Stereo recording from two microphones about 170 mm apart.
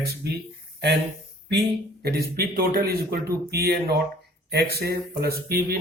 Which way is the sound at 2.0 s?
65° right (ahead or behind).